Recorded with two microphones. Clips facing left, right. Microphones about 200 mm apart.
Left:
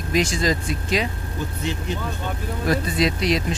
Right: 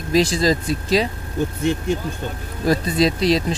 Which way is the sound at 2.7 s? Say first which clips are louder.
Right 4 dB; 35° right (ahead or behind).